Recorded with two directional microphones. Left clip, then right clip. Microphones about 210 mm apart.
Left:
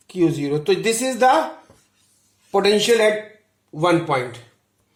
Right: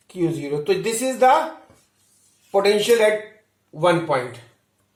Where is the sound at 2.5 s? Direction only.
50° left (ahead or behind).